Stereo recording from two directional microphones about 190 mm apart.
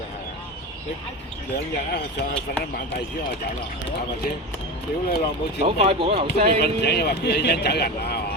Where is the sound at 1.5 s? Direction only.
60° left (ahead or behind).